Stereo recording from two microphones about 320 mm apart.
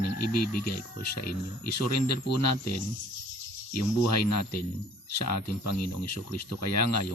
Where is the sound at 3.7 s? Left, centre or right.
Left.